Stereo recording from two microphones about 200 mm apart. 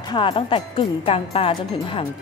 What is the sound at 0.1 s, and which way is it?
Speech, 25° left (ahead or behind).